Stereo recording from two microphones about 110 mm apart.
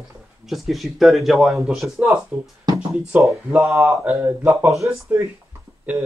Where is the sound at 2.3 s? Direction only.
10° right (ahead or behind).